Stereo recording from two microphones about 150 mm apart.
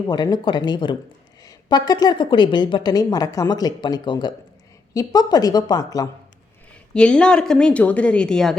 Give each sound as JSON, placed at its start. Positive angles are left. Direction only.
{"t": 0.1, "sound": "a woman's voice", "side_deg": 30}
{"t": 6.9, "sound": "a woman's voice", "side_deg": 5}